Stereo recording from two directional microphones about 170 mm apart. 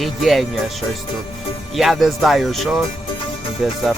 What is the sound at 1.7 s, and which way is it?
Speech, centre (ahead or behind).